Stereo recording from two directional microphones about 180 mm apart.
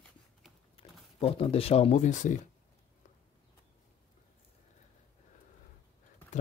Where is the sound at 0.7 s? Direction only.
30° left (ahead or behind).